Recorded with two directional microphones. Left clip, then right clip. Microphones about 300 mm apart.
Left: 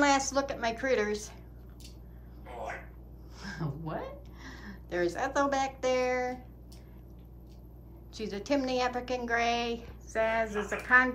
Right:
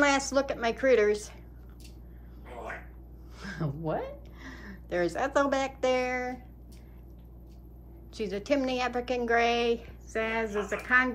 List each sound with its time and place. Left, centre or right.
0.0 s a woman's voice: centre
3.3 s a woman's voice: centre
8.1 s a woman's voice: centre